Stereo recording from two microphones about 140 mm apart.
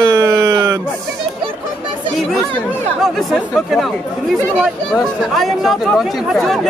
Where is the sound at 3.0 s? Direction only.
Centre (ahead or behind).